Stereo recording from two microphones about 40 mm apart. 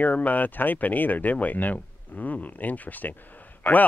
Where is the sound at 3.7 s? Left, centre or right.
Centre.